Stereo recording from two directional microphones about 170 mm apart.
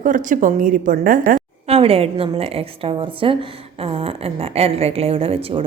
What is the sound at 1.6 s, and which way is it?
A woman's voice, 35° right (ahead or behind).